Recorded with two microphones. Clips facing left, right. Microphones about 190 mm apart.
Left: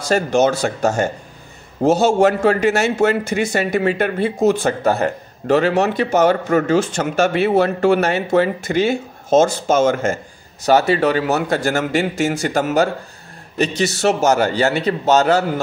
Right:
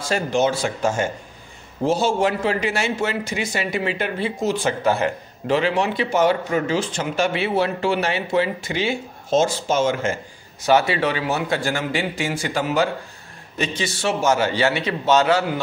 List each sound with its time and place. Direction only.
0.1 s a man's voice: 45° left (ahead or behind)